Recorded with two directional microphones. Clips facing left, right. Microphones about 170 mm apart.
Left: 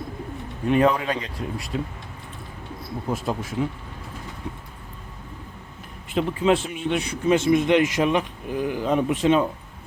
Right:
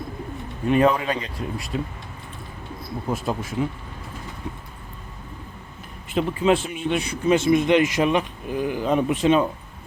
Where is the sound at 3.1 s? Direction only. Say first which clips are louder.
Right 1 dB; 5° right (ahead or behind).